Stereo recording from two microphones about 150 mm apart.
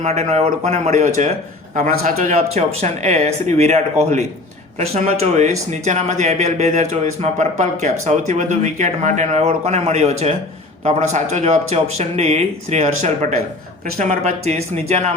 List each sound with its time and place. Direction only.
0.0 s speech: 50° right (ahead or behind)
1.7 s a man's voice: 65° right (ahead or behind)
2.1 s speech: 50° right (ahead or behind)